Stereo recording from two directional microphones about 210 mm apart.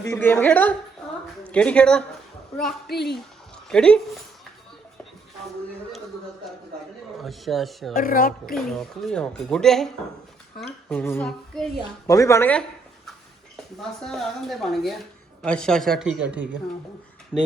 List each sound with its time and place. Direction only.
0.0 s a woman's voice: 10° left (ahead or behind)
2.9 s speech: 50° left (ahead or behind)
3.7 s a woman's voice: 5° left (ahead or behind)
7.2 s a woman's voice: centre (ahead or behind)
7.9 s speech: 40° left (ahead or behind)
8.5 s a woman's voice: centre (ahead or behind)
10.8 s child singing: 10° left (ahead or behind)
12.0 s a woman's voice: 15° left (ahead or behind)
14.0 s a woman's voice: centre (ahead or behind)